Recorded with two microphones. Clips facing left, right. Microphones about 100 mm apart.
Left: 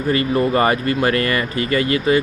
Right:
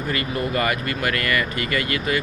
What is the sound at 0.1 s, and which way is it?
Speech, 30° left (ahead or behind).